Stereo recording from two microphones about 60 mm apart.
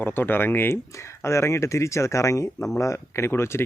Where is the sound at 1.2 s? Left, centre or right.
Left.